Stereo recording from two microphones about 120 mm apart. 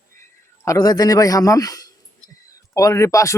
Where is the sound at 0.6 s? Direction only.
30° left (ahead or behind).